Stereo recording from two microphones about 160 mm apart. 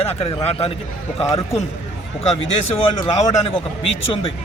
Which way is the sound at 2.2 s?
40° left (ahead or behind).